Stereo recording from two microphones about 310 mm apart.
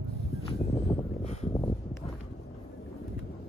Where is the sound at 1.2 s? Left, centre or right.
Left.